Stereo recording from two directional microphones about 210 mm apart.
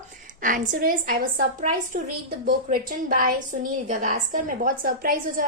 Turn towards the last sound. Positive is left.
turn(degrees=-40)  # may be behind; listen again after turning